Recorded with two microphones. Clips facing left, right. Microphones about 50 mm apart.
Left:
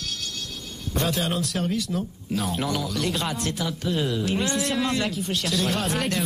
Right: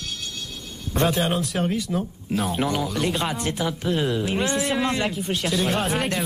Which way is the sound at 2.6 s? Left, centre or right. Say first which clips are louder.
Right 3 dB; right.